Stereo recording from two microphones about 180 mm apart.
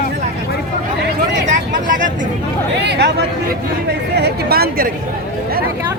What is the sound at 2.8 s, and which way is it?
Speech, 70° right (ahead or behind).